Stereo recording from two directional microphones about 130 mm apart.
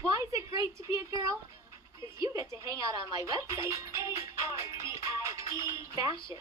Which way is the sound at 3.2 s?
25° right (ahead or behind).